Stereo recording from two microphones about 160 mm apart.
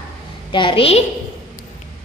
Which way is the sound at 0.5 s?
30° left (ahead or behind).